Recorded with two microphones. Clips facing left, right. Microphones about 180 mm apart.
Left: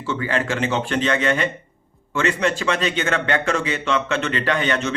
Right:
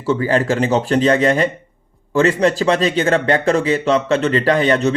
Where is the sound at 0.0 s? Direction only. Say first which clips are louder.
Right 7 dB; 35° right (ahead or behind).